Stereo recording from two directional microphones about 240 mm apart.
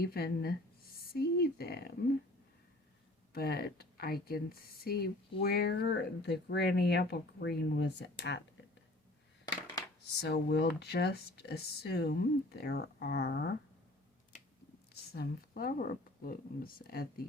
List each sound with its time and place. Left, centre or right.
0.0 s speech: left
3.3 s speech: left
10.2 s speech: left
15.1 s speech: left